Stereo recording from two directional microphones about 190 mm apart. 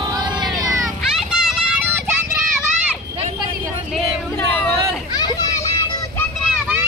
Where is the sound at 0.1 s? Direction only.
20° right (ahead or behind).